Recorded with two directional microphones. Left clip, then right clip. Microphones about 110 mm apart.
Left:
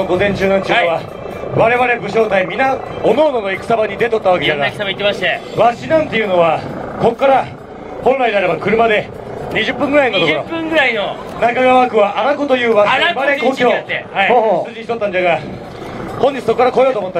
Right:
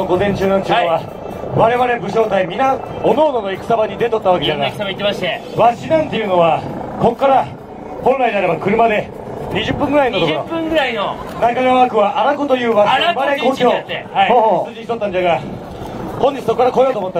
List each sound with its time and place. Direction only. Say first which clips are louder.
0.0 s a man's voice: left 1 dB; 40° left (ahead or behind)
13.1 s a man's voice: left 1 dB; 55° left (ahead or behind)